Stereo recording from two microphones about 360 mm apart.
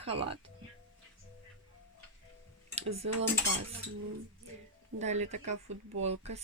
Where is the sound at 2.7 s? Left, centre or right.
Centre.